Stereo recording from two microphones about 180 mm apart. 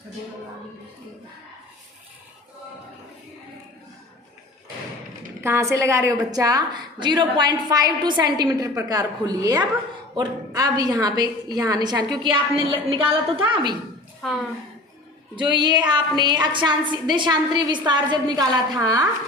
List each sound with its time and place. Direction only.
5.4 s a woman's voice: 15° right (ahead or behind); by 13.7 s 30° right (ahead or behind)
15.4 s a woman's voice: 25° right (ahead or behind)